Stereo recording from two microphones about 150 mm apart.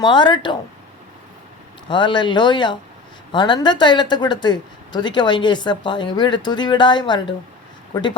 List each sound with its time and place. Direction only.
0.0 s speech: 30° left (ahead or behind)
1.9 s speech: 30° left (ahead or behind)